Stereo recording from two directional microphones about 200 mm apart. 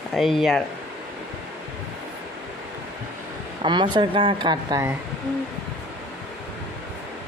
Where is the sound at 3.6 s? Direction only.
20° right (ahead or behind).